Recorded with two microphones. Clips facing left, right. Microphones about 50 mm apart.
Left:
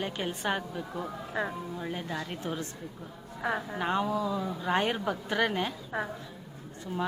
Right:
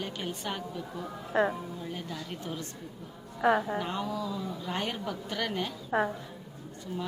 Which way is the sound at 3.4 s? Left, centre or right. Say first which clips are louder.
Right 6 dB; centre.